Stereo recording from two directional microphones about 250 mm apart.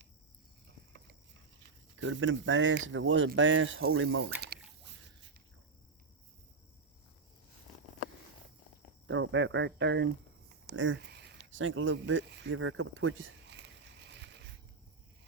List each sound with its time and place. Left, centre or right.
2.0 s speech: right
9.0 s speech: right
10.7 s a sound: right